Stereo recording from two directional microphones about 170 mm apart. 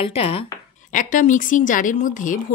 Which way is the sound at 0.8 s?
50° left (ahead or behind).